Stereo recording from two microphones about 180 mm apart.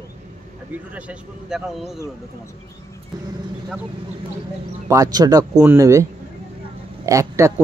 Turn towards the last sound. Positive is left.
turn(degrees=-15)  # may be behind; listen again after turning